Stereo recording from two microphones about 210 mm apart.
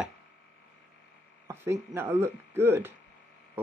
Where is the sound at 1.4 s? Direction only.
10° right (ahead or behind).